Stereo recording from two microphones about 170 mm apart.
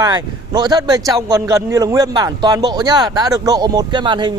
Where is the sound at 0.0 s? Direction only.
25° right (ahead or behind).